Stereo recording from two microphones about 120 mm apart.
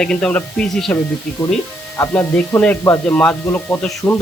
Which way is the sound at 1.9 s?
10° left (ahead or behind).